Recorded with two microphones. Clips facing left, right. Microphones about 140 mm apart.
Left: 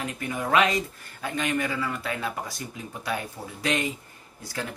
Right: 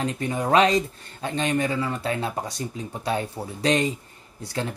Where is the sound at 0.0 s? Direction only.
30° right (ahead or behind).